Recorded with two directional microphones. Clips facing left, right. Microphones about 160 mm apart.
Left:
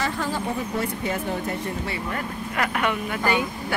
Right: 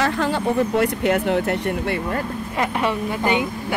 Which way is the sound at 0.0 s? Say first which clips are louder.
Right 6 dB; 70° right (ahead or behind).